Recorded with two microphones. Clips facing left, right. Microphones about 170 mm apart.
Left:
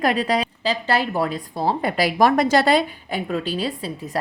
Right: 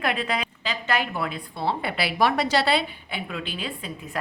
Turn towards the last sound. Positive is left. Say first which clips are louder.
# left 6 dB
turn(degrees=35)  # may be behind; listen again after turning